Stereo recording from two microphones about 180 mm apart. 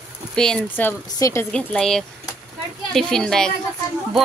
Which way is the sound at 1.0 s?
20° left (ahead or behind).